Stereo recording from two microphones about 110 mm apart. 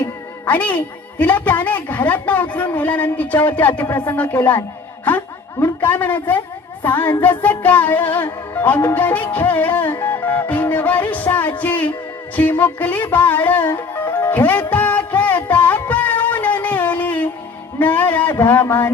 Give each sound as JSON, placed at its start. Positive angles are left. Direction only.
{"t": 0.0, "sound": "a woman's voice", "side_deg": 15}
{"t": 6.8, "sound": "music", "side_deg": 15}
{"t": 12.4, "sound": "a woman's voice", "side_deg": 15}
{"t": 13.7, "sound": "music", "side_deg": 20}
{"t": 17.7, "sound": "a sound", "side_deg": 15}